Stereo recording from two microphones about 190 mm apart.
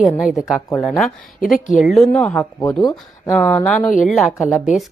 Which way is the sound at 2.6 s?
20° left (ahead or behind).